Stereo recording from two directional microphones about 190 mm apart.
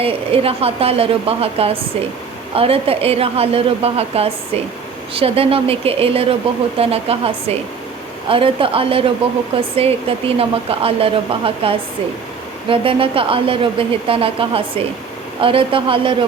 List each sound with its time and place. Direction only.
0.0 s a woman's voice: 30° right (ahead or behind)